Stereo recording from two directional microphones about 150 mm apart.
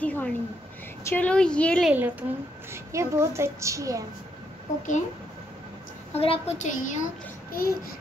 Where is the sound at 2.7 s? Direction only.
20° right (ahead or behind).